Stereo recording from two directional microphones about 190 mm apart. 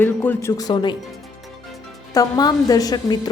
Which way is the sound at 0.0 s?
10° left (ahead or behind).